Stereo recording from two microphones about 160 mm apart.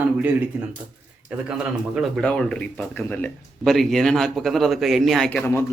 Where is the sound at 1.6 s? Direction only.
5° right (ahead or behind).